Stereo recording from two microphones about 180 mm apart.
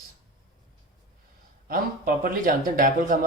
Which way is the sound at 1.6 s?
55° right (ahead or behind).